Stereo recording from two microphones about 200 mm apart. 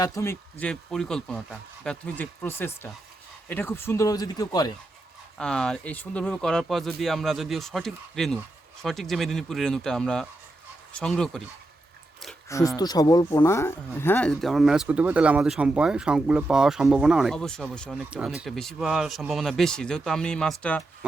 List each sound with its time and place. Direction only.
0.0 s speech: 15° left (ahead or behind)
0.6 s speech: 5° left (ahead or behind)
5.4 s speech: 5° left (ahead or behind)
12.5 s speech: 15° left (ahead or behind)